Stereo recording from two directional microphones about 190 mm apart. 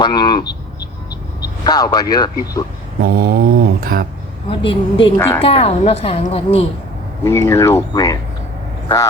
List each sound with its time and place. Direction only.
0.0 s speech: 20° left (ahead or behind)
3.0 s speech: 55° right (ahead or behind)
4.4 s speech: 25° left (ahead or behind)
5.1 s speech: 15° left (ahead or behind)
5.4 s a woman's voice: 30° left (ahead or behind)
7.3 s speech: 15° left (ahead or behind)